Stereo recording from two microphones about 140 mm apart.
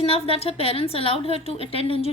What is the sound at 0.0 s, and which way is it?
A woman's voice, 40° left (ahead or behind).